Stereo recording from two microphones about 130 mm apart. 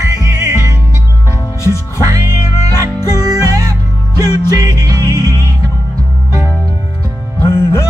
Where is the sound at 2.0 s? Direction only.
30° right (ahead or behind).